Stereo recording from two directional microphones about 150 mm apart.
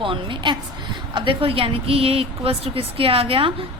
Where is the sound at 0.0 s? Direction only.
35° right (ahead or behind).